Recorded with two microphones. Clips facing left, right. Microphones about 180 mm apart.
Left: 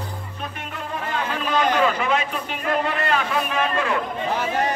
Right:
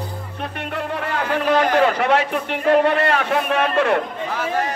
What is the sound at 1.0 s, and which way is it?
A man's voice, 70° right (ahead or behind).